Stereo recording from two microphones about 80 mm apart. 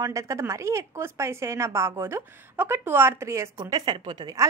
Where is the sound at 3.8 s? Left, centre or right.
Right.